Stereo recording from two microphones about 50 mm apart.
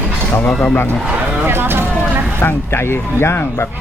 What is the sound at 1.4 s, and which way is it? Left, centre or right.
Speech, right.